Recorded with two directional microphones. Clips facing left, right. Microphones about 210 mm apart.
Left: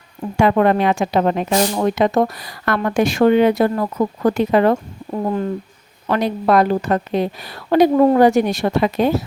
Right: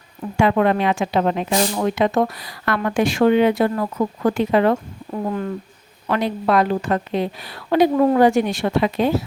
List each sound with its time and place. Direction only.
0.3 s speech: 45° left (ahead or behind)
6.1 s a woman's voice: 40° left (ahead or behind)